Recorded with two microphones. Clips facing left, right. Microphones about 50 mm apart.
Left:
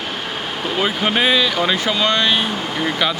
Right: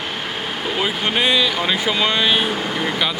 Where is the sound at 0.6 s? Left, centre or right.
Centre.